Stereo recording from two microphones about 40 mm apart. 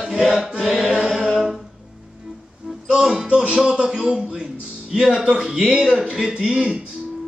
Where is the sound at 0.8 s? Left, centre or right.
Centre.